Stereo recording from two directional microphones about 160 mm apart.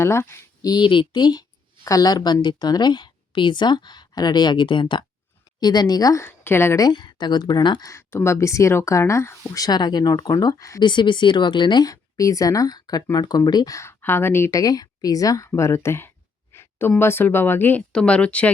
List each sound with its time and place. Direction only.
0.0 s a woman's voice: 15° left (ahead or behind)